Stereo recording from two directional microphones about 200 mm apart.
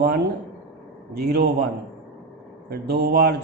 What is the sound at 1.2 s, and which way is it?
Speech, 55° right (ahead or behind).